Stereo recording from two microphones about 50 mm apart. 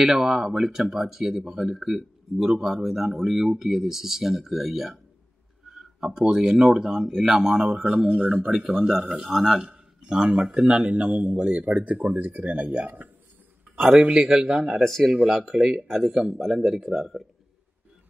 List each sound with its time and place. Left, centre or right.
0.0 s speech: centre
8.1 s a man's voice: right
9.1 s speech: centre
9.6 s a man's voice: centre
14.0 s a man's voice: centre
14.8 s speech: centre